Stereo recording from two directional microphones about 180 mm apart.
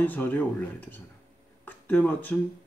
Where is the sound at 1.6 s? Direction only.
10° left (ahead or behind).